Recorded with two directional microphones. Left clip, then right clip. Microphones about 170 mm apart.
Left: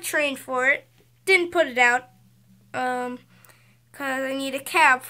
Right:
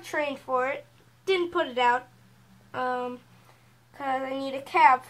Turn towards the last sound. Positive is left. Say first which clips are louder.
# left 1 dB
turn(degrees=15)  # may be behind; listen again after turning